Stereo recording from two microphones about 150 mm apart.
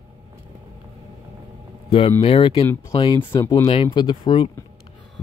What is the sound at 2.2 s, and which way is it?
Speech, 40° left (ahead or behind).